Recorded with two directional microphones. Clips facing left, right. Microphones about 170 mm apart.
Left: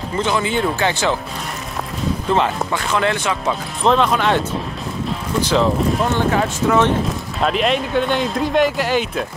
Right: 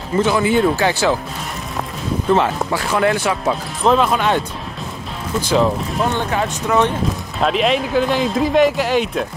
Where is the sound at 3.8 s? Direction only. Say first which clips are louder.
Even; 5° right (ahead or behind).